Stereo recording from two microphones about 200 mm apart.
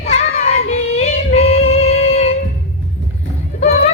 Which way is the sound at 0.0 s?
35° left (ahead or behind).